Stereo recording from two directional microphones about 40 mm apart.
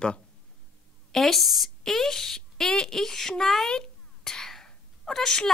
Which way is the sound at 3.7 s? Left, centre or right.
Centre.